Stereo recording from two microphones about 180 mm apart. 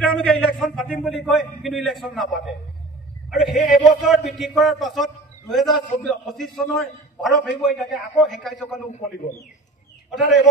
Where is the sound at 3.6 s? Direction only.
Centre (ahead or behind).